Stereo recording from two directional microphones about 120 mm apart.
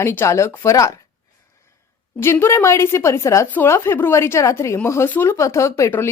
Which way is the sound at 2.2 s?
20° left (ahead or behind).